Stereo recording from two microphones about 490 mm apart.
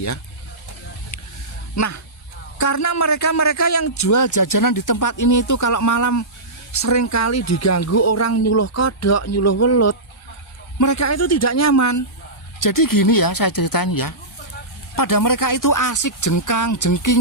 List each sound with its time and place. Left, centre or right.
1.7 s a man's voice: left